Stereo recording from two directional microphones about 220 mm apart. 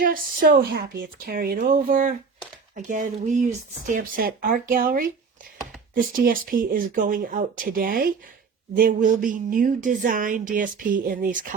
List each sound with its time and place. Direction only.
0.0 s a woman's voice: 40° right (ahead or behind)